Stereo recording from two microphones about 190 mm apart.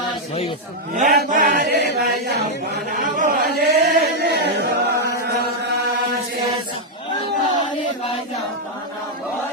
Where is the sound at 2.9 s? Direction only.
45° right (ahead or behind).